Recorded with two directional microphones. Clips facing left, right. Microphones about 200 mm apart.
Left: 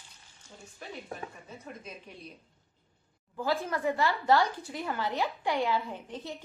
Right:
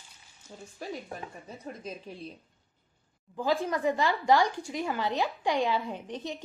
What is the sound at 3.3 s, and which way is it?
Speech, 15° right (ahead or behind).